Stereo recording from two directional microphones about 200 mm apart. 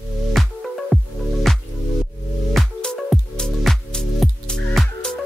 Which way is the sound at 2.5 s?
Centre (ahead or behind).